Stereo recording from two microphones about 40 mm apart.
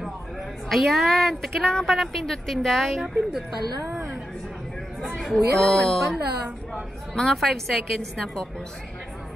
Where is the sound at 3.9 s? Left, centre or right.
Centre.